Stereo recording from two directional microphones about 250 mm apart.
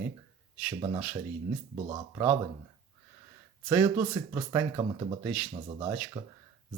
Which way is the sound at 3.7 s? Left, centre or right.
Centre.